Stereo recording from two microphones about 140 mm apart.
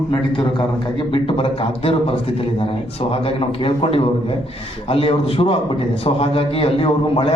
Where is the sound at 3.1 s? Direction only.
40° left (ahead or behind).